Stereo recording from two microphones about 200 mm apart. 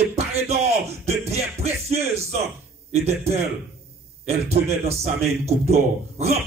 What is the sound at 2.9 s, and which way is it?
Speech, 30° right (ahead or behind).